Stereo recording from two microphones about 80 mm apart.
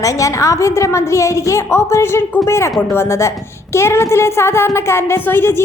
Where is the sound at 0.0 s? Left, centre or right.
Left.